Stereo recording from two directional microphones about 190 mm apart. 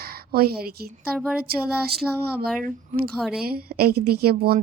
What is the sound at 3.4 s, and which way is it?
A woman's voice, 55° right (ahead or behind).